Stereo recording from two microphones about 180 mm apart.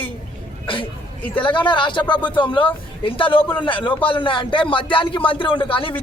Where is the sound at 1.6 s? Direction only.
25° left (ahead or behind).